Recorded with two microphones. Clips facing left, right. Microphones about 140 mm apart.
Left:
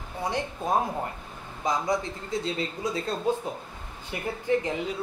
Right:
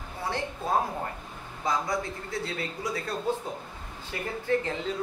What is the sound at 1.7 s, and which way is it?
A man's voice, 20° left (ahead or behind).